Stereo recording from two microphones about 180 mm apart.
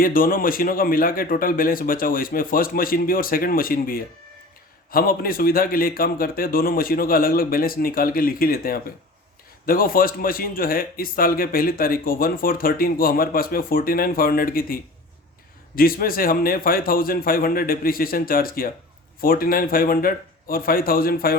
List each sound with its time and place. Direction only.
0.0 s a man's voice: 50° left (ahead or behind)